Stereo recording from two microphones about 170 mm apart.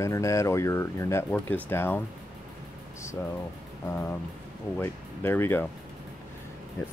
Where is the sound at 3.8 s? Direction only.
15° left (ahead or behind).